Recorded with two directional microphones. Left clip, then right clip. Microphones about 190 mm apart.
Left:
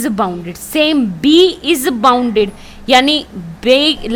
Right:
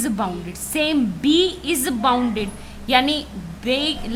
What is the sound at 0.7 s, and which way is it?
A woman's voice, 40° left (ahead or behind).